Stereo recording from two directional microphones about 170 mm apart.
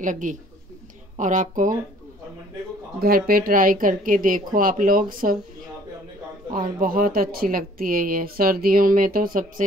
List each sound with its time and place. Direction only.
0.0 s speech: 50° right (ahead or behind)
3.0 s speech: 60° right (ahead or behind)
6.5 s speech: 55° right (ahead or behind)